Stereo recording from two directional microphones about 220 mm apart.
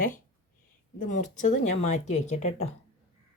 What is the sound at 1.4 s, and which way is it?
Speech, 35° left (ahead or behind).